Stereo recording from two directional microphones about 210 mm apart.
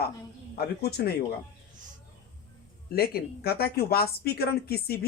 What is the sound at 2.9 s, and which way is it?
Speech, 50° left (ahead or behind).